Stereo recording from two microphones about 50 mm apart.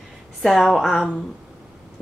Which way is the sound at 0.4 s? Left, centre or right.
Centre.